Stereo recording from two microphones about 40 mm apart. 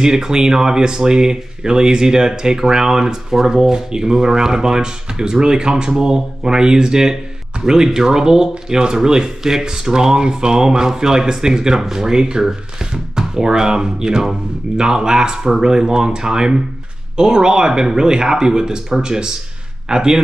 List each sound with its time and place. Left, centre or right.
0.0 s speech: centre